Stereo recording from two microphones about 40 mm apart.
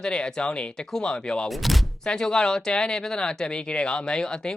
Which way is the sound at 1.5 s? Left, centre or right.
Centre.